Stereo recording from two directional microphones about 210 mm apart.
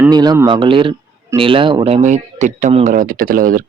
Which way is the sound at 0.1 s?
20° right (ahead or behind).